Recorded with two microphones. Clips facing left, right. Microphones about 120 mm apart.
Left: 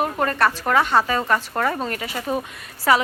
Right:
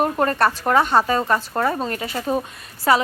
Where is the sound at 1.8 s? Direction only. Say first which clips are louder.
Right 2 dB; 30° right (ahead or behind).